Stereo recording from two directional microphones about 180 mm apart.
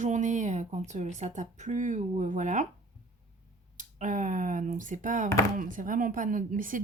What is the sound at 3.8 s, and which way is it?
Speech, 45° right (ahead or behind).